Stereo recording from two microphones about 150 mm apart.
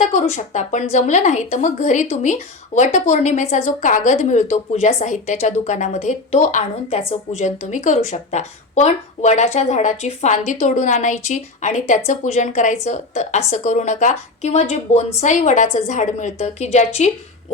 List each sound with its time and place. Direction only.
0.0 s a woman's voice: 55° left (ahead or behind)